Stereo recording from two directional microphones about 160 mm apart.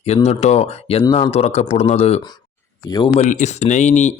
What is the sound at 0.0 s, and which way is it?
Speech, 40° left (ahead or behind).